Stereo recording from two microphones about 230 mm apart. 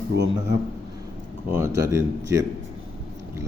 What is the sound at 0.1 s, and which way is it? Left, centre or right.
Speech, right.